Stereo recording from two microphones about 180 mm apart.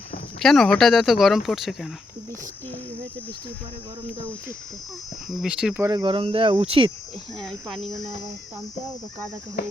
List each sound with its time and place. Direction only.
0.3 s speech: centre (ahead or behind)
5.3 s speech: 5° right (ahead or behind)
5.8 s speech: 25° right (ahead or behind)
7.3 s speech: centre (ahead or behind)